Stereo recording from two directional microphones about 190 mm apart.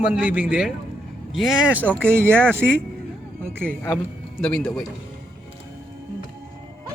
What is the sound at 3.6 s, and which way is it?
Speech, 10° left (ahead or behind).